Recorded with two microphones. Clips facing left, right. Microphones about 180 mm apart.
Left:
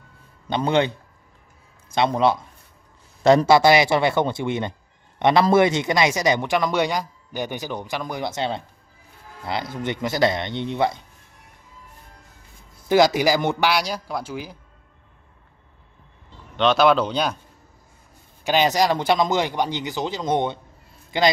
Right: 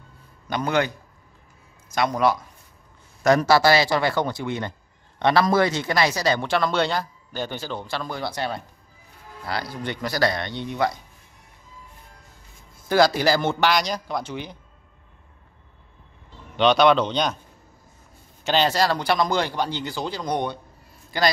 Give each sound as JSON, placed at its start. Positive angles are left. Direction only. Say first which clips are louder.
{"t": 0.5, "sound": "speech", "louder": "left 3 dB", "side_deg": 25}
{"t": 2.0, "sound": "speech", "louder": "left 2 dB", "side_deg": 25}
{"t": 12.8, "sound": "speech", "louder": "left 2 dB", "side_deg": 15}
{"t": 16.5, "sound": "speech", "louder": "even", "side_deg": 0}
{"t": 18.4, "sound": "speech", "louder": "left 2 dB", "side_deg": 10}